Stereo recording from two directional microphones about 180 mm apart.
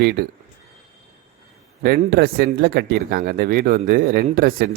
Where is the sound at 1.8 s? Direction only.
60° right (ahead or behind).